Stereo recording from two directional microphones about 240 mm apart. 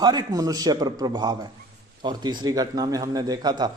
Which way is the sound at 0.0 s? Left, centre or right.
Centre.